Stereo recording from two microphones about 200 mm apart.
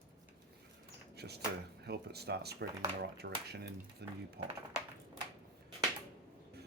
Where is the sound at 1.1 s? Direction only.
55° right (ahead or behind).